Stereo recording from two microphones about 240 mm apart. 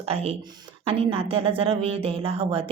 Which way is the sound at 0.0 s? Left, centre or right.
Right.